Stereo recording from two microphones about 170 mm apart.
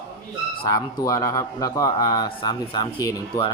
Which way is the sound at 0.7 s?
20° left (ahead or behind).